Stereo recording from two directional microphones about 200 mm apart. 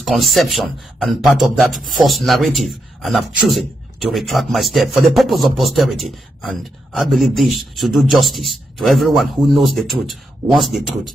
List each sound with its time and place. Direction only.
0.0 s speech: centre (ahead or behind)